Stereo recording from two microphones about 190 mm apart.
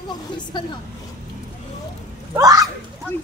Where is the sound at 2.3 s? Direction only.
20° right (ahead or behind).